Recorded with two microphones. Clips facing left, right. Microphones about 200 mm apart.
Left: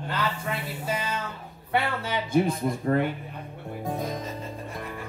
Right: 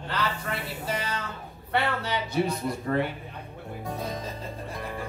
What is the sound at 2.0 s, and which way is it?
Speech, 50° left (ahead or behind).